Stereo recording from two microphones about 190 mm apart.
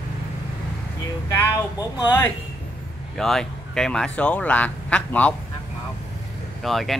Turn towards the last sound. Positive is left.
turn(degrees=0)  # may be behind; listen again after turning